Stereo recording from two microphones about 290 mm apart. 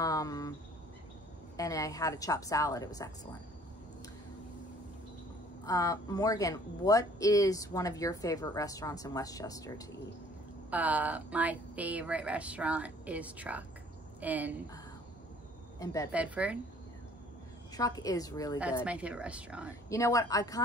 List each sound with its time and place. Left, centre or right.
0.0 s a sound: centre
1.6 s speech: centre
5.7 s speech: centre
10.7 s speech: centre
15.8 s speech: centre
16.1 s speech: centre
17.7 s speech: centre
18.9 s speech: centre
19.9 s speech: centre